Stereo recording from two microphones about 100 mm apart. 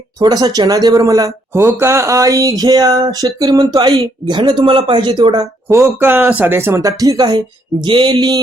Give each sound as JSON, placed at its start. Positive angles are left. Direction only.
{"t": 0.2, "sound": "speech", "side_deg": -40}
{"t": 5.6, "sound": "speech", "side_deg": -20}